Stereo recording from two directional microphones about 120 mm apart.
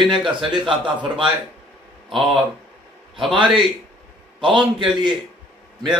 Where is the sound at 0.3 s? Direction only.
40° right (ahead or behind).